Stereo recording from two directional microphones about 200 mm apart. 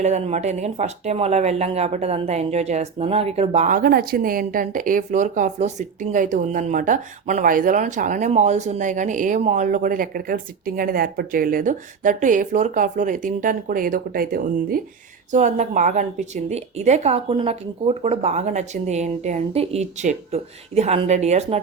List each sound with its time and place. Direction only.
0.0 s speech: 35° right (ahead or behind)